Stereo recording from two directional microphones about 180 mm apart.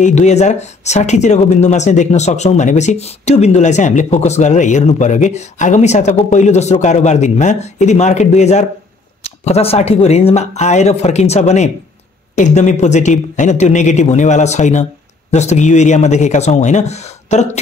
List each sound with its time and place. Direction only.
0.0 s speech: 40° left (ahead or behind)